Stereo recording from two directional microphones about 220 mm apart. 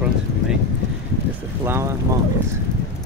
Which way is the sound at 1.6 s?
10° right (ahead or behind).